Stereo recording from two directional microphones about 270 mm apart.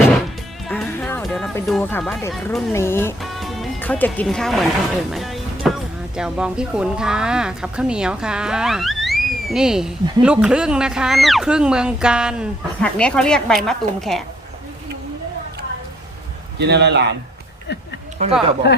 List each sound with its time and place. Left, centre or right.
0.7 s speech: centre
16.6 s a man's voice: right
17.7 s speech: left
18.2 s speech: right
18.6 s speech: left